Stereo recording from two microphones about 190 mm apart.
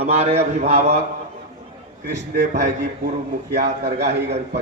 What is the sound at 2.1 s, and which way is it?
A man's voice, 60° right (ahead or behind).